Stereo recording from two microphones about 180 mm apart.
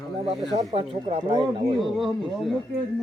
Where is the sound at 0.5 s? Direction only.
30° right (ahead or behind).